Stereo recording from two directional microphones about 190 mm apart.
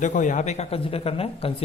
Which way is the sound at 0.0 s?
40° left (ahead or behind).